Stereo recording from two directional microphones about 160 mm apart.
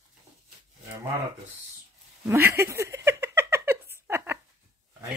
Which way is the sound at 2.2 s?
15° right (ahead or behind).